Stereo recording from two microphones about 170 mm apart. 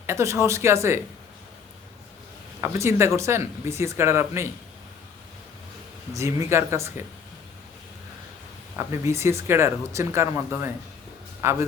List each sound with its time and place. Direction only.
0.0 s speech: 15° right (ahead or behind)
2.6 s speech: 15° right (ahead or behind)
6.1 s speech: 15° right (ahead or behind)
8.9 s speech: 15° right (ahead or behind)